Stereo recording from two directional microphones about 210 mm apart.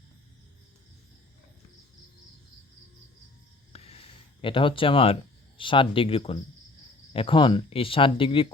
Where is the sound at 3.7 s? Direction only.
30° left (ahead or behind).